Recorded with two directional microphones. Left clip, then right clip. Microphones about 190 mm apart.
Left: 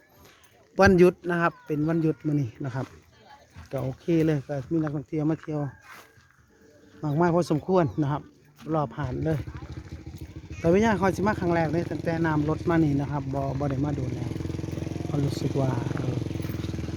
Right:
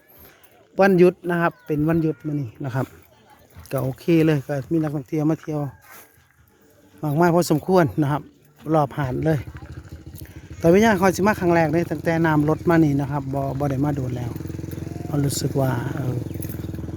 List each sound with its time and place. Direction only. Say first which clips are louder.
0.8 s speech: right 3 dB; 10° right (ahead or behind)
2.2 s speech: even; centre (ahead or behind)
3.7 s speech: right 6 dB; 30° right (ahead or behind)
7.0 s speech: right 5 dB; 20° right (ahead or behind)
9.6 s vehicle: right 1 dB; 35° left (ahead or behind)
10.6 s speech: right 6 dB; 25° right (ahead or behind)
13.9 s vehicle: right 4 dB; 35° left (ahead or behind)
15.3 s speech: right 6 dB; 25° right (ahead or behind)
16.1 s vehicle: right 1 dB; 30° left (ahead or behind)